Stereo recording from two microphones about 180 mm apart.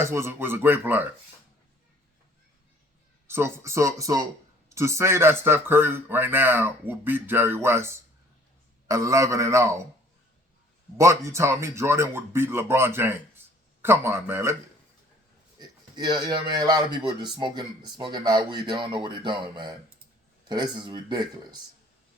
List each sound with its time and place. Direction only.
0.0 s a man's voice: 15° right (ahead or behind)
3.2 s a man's voice: 15° right (ahead or behind)
10.9 s a man's voice: 15° right (ahead or behind)
15.5 s a man's voice: 25° right (ahead or behind)